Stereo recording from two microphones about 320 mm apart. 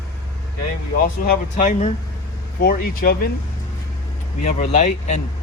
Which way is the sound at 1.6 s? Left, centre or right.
Left.